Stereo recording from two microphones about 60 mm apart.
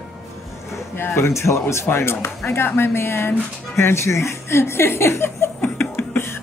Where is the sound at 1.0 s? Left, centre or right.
Left.